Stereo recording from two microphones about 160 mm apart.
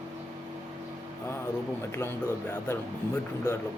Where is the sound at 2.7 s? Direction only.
15° left (ahead or behind).